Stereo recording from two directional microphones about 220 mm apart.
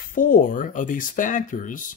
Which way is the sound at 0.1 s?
40° left (ahead or behind).